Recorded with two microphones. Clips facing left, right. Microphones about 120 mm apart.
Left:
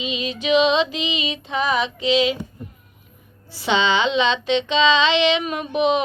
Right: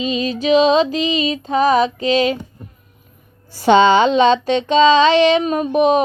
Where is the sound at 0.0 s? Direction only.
40° right (ahead or behind).